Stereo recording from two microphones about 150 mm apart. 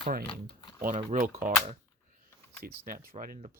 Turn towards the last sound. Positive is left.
turn(degrees=-75)  # may be behind; listen again after turning